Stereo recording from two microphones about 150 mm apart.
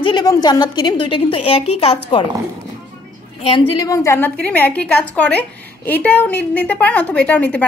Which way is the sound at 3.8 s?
20° left (ahead or behind).